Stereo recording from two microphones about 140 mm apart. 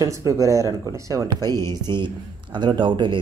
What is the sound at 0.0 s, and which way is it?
Speech, 25° right (ahead or behind).